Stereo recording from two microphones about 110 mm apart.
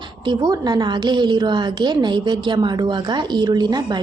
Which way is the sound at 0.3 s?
40° right (ahead or behind).